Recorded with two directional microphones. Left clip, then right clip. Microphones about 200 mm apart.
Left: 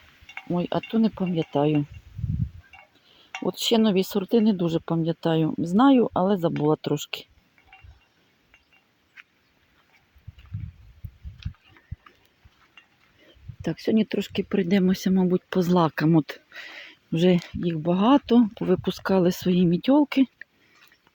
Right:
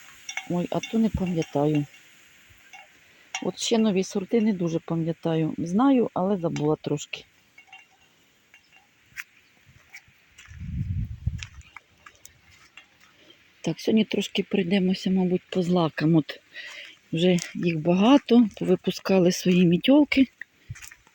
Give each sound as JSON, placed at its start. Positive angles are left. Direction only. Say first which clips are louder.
{"t": 0.5, "sound": "speech", "louder": "left 2 dB", "side_deg": 5}
{"t": 3.6, "sound": "speech", "louder": "left 2 dB", "side_deg": 10}
{"t": 13.6, "sound": "speech", "louder": "even", "side_deg": 0}
{"t": 17.6, "sound": "speech", "louder": "right 1 dB", "side_deg": -5}